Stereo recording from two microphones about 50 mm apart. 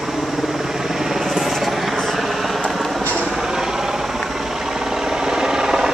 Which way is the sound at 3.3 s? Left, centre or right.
Centre.